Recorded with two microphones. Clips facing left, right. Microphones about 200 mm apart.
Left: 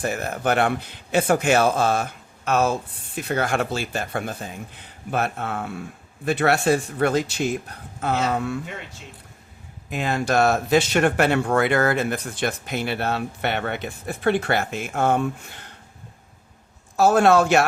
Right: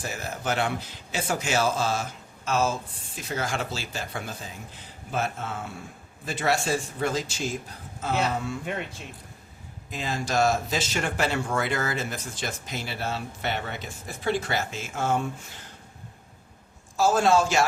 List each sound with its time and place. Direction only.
0.0 s speech: 60° left (ahead or behind)
9.9 s speech: 60° left (ahead or behind)
17.0 s speech: 60° left (ahead or behind)